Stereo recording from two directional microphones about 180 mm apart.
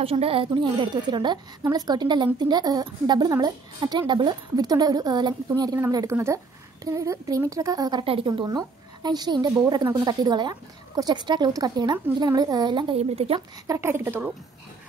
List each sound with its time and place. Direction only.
0.0 s a woman's voice: 30° right (ahead or behind)
13.7 s a woman's voice: 15° right (ahead or behind)